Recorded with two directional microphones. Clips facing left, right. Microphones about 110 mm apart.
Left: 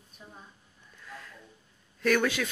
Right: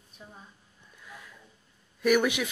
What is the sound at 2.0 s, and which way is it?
Speech, 15° right (ahead or behind).